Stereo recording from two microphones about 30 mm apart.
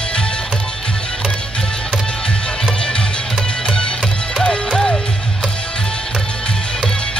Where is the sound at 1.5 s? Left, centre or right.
Left.